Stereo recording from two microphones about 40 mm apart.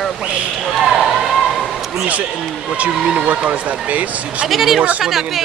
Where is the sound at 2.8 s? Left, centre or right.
Right.